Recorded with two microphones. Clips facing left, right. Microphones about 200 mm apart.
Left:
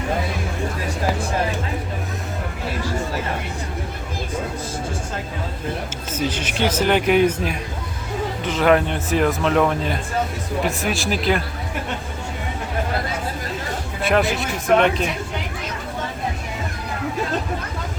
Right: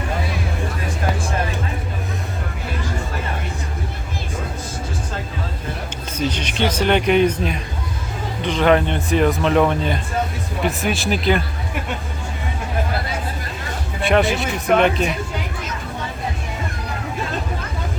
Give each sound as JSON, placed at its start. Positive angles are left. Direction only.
{"t": 6.1, "sound": "speech", "side_deg": 5}
{"t": 14.0, "sound": "speech", "side_deg": 0}